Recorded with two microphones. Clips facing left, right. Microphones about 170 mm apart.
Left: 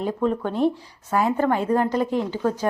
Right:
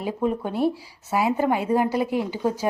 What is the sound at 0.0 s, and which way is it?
Speech, 10° right (ahead or behind).